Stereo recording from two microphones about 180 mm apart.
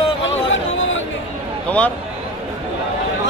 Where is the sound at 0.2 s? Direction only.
90° left.